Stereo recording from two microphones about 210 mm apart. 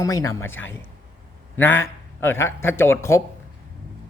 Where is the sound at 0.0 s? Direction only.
15° left (ahead or behind).